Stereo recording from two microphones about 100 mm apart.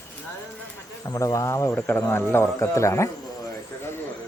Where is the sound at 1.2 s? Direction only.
30° left (ahead or behind).